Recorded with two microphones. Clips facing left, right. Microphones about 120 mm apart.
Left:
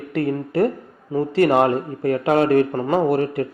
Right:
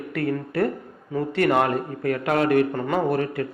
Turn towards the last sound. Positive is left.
turn(degrees=30)  # may be behind; listen again after turning